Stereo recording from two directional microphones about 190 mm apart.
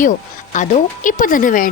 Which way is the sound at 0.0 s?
40° left (ahead or behind).